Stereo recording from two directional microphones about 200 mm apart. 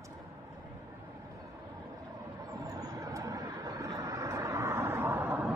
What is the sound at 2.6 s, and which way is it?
Vehicle, 15° right (ahead or behind).